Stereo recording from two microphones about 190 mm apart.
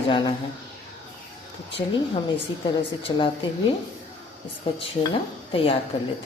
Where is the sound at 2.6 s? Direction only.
25° left (ahead or behind).